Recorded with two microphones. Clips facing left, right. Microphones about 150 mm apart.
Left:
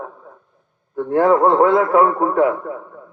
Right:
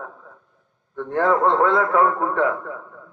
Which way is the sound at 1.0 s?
15° left (ahead or behind).